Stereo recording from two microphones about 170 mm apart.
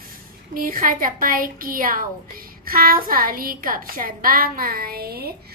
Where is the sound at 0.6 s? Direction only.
55° right (ahead or behind).